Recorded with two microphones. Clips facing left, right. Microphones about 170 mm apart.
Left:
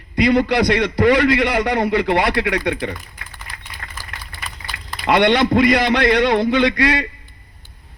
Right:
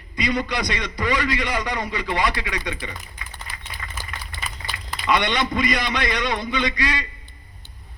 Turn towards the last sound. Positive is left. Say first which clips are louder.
# left 8 dB
turn(degrees=60)  # may be behind; listen again after turning